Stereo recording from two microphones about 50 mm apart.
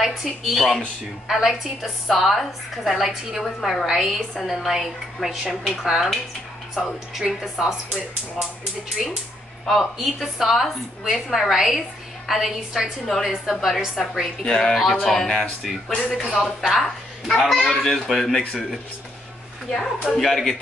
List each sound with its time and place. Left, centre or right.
0.0 s a woman's voice: centre
9.0 s a woman's voice: centre
14.4 s a woman's voice: centre
15.9 s speech: left
16.3 s a woman's voice: centre
19.7 s a woman's voice: centre